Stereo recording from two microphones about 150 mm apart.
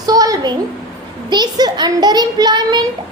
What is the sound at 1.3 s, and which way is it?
A child's voice, 30° right (ahead or behind).